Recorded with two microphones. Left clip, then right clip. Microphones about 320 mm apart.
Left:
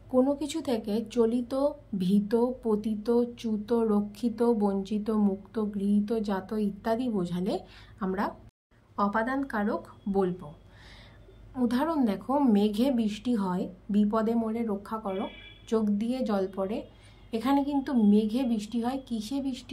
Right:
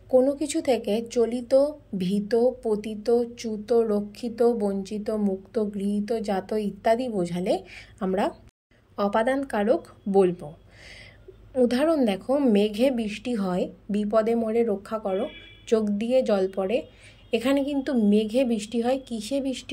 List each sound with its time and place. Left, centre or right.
0.2 s a woman's voice: centre
5.6 s speech: right
6.2 s speech: centre
11.6 s a woman's voice: centre